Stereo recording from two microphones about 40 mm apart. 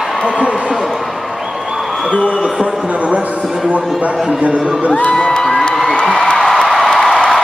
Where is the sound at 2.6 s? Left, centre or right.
Right.